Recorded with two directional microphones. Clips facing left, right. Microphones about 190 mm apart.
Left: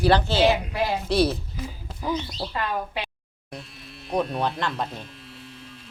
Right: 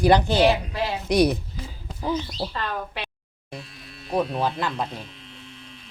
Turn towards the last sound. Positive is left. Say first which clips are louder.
# right 1 dB
turn(degrees=0)  # may be behind; listen again after turning